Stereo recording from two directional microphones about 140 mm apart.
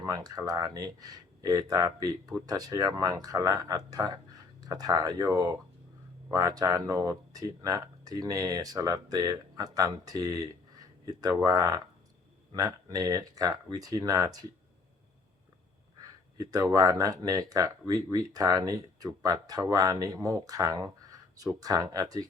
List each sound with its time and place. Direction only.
0.0 s speech: 25° right (ahead or behind)
16.4 s speech: 25° right (ahead or behind)